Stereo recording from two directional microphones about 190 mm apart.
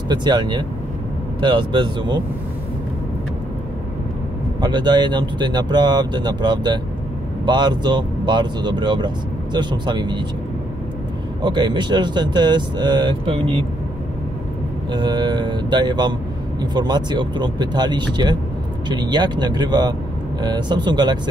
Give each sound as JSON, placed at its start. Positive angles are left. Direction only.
{"t": 0.1, "sound": "speech", "side_deg": -20}
{"t": 4.6, "sound": "speech", "side_deg": -20}
{"t": 11.4, "sound": "speech", "side_deg": -25}
{"t": 14.9, "sound": "speech", "side_deg": -25}